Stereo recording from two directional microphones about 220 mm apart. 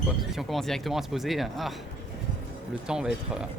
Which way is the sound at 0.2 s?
Centre (ahead or behind).